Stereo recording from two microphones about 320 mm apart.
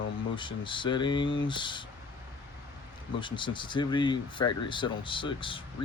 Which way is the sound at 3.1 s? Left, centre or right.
Centre.